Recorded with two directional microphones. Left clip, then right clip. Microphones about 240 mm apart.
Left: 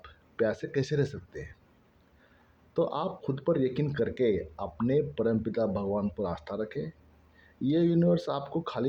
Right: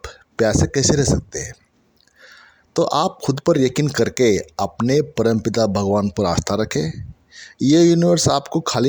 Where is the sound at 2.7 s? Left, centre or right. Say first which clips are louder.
Right 12 dB; right.